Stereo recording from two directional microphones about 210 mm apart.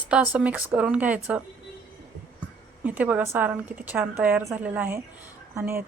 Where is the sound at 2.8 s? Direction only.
5° right (ahead or behind).